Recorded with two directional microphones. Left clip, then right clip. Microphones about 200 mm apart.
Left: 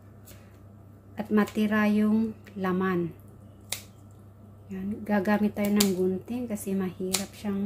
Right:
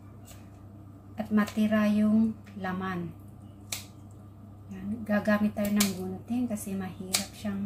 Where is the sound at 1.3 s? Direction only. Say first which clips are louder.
Left 2 dB; 50° left (ahead or behind).